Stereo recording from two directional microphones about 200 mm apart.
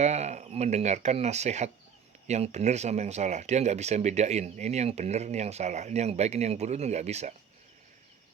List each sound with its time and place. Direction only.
0.0 s speech: 35° right (ahead or behind)